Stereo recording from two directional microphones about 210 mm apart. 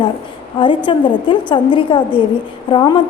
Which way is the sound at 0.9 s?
25° left (ahead or behind).